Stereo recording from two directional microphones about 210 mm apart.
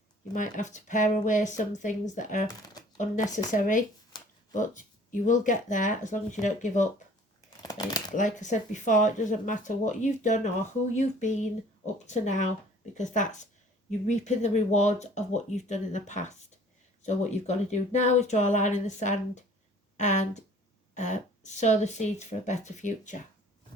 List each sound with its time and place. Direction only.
0.3 s speech: 35° left (ahead or behind)
7.6 s shuffling cards: 15° left (ahead or behind)
8.1 s speech: 35° left (ahead or behind)